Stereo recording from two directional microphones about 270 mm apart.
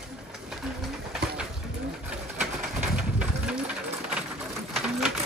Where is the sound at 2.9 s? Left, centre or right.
Centre.